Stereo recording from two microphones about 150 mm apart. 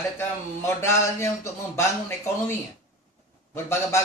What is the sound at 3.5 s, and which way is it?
Speech, 15° left (ahead or behind).